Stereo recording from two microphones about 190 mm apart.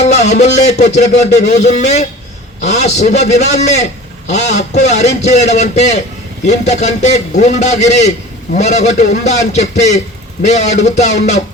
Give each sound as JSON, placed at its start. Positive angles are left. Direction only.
{"t": 0.0, "sound": "speech", "side_deg": 35}